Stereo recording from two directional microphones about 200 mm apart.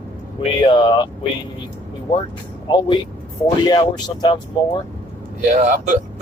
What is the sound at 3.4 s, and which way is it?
Speech, 20° left (ahead or behind).